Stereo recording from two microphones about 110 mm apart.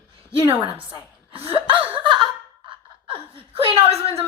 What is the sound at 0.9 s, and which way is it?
Speech, 55° right (ahead or behind).